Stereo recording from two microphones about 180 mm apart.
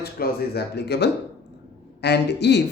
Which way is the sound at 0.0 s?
60° left (ahead or behind).